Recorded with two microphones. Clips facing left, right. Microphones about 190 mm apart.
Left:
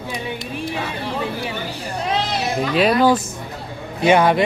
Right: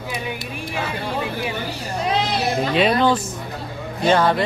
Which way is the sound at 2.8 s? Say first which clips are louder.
Left 3 dB; 5° left (ahead or behind).